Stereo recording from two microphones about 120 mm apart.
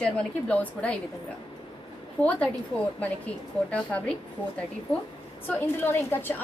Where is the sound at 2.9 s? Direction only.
10° left (ahead or behind).